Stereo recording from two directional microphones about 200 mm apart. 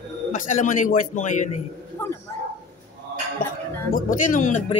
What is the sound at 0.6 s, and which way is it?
Speech, 40° left (ahead or behind).